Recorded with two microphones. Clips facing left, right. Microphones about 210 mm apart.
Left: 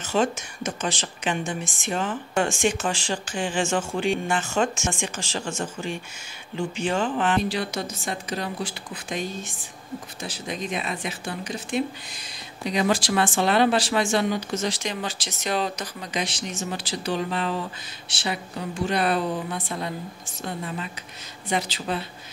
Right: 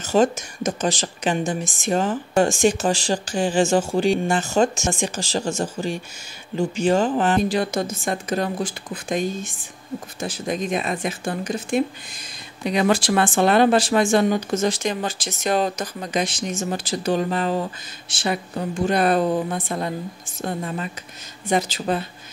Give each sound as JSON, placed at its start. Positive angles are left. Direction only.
{"t": 0.0, "sound": "a woman's voice", "side_deg": -40}